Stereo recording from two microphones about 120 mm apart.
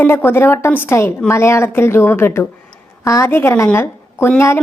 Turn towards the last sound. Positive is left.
turn(degrees=20)  # may be behind; listen again after turning